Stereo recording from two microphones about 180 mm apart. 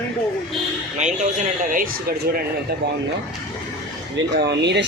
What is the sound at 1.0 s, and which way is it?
Speech, 40° right (ahead or behind).